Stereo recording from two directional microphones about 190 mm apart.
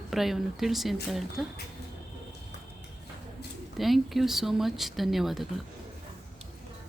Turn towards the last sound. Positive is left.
turn(degrees=0)  # may be behind; listen again after turning